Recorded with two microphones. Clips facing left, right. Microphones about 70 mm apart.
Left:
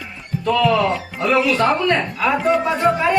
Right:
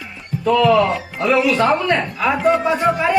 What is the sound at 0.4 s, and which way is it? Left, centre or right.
A woman's voice, centre.